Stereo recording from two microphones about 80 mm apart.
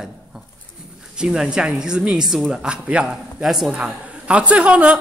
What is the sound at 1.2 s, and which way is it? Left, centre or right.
Speech, centre.